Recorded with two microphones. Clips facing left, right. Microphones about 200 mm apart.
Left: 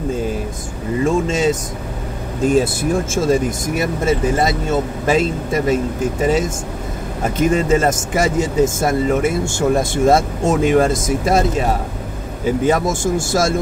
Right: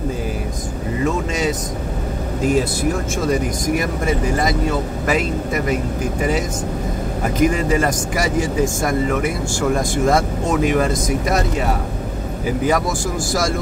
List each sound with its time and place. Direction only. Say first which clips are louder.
1.0 s vehicle: left 4 dB; 25° left (ahead or behind)
2.4 s speech: left 3 dB; 25° left (ahead or behind)
7.3 s speech: left 2 dB; 25° left (ahead or behind)
12.6 s speech: left 2 dB; 25° left (ahead or behind)